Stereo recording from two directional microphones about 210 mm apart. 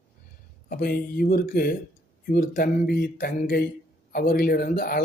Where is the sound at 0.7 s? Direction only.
45° left (ahead or behind).